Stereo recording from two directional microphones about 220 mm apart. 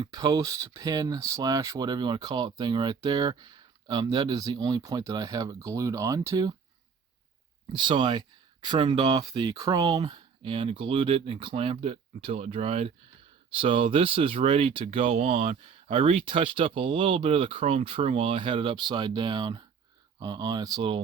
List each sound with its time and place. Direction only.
0.0 s speech: 15° right (ahead or behind)
7.7 s speech: 20° right (ahead or behind)